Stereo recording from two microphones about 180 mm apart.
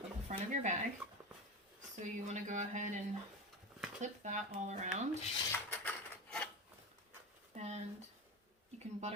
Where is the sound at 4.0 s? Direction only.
40° right (ahead or behind).